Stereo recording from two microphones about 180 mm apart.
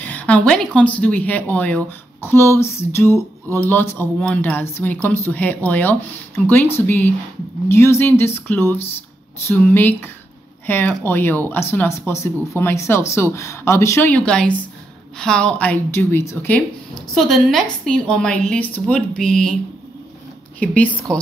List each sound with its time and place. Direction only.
0.0 s a woman's voice: 10° left (ahead or behind)
20.5 s speech: 10° left (ahead or behind)